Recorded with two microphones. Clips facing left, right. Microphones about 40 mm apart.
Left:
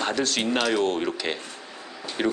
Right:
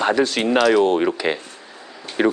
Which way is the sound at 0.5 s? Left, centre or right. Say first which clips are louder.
Right 10 dB; right.